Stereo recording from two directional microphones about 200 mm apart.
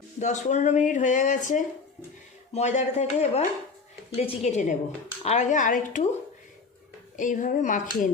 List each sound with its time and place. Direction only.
0.2 s speech: 35° left (ahead or behind)
7.2 s speech: 40° left (ahead or behind)